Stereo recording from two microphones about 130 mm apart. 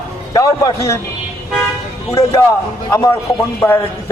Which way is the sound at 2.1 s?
20° left (ahead or behind).